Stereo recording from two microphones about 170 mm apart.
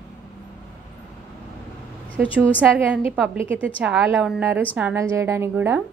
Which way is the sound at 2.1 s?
10° right (ahead or behind).